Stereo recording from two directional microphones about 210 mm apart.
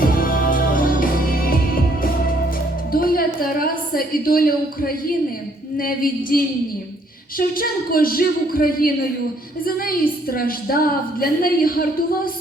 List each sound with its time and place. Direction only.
0.0 s music: 45° left (ahead or behind)
2.9 s a sound: 45° left (ahead or behind)
5.7 s a woman's voice: 45° left (ahead or behind)